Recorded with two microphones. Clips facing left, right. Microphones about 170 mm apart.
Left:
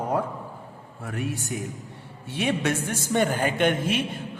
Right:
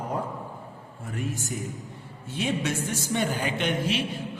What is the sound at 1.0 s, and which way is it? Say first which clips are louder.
Speech: left 2 dB; 65° left (ahead or behind).